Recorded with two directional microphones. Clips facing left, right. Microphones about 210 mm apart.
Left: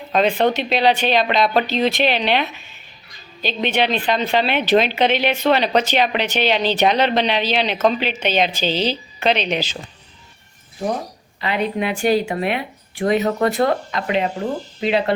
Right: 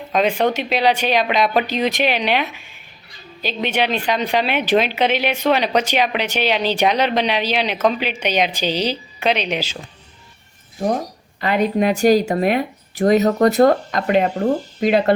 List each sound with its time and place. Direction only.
0.1 s a woman's voice: 10° right (ahead or behind)
11.3 s speech: 45° right (ahead or behind)